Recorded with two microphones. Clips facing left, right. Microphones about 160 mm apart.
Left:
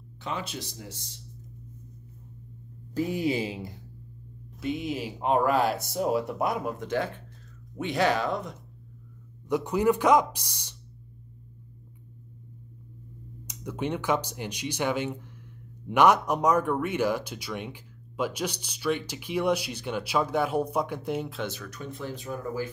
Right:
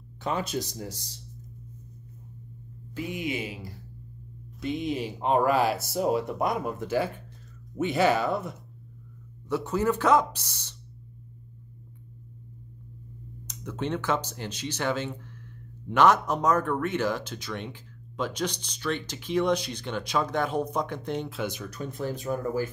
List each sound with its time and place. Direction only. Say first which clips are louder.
0.2 s speech: right 5 dB; 45° right (ahead or behind)
2.9 s speech: left 5 dB; 35° left (ahead or behind)
4.6 s speech: right 1 dB; 5° left (ahead or behind)
9.5 s speech: left 2 dB; 15° left (ahead or behind)
13.5 s speech: even; 10° left (ahead or behind)
21.4 s speech: right 2 dB; 15° right (ahead or behind)
21.6 s speech: right 4 dB; 40° right (ahead or behind)